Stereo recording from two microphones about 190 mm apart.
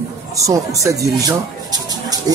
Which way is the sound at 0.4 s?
15° right (ahead or behind).